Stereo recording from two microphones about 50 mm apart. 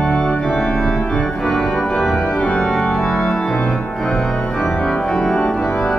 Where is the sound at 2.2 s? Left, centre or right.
Left.